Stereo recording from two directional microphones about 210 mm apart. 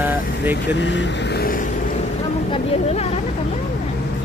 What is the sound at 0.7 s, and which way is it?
Speech, 60° left (ahead or behind).